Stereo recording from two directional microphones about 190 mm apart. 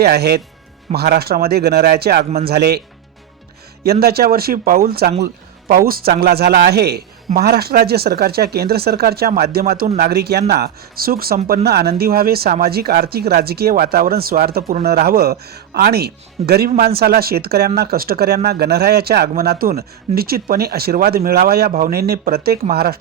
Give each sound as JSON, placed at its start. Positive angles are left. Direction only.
{"t": 0.0, "sound": "speech", "side_deg": -55}
{"t": 4.0, "sound": "speech", "side_deg": -55}